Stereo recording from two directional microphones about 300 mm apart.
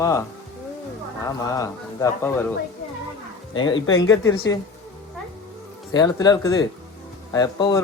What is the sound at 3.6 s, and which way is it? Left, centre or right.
Speech, centre.